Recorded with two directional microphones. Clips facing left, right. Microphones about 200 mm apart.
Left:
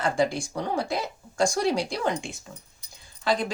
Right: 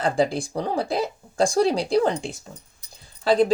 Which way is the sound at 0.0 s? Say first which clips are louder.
Right 3 dB; 35° right (ahead or behind).